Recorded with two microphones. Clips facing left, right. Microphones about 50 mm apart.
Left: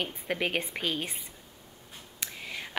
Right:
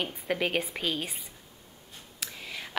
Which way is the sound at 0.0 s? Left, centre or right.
Centre.